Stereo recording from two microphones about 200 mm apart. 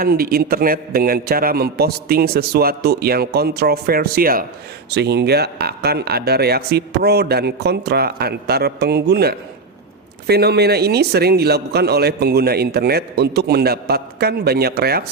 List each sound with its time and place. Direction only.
0.0 s a man's voice: 50° right (ahead or behind)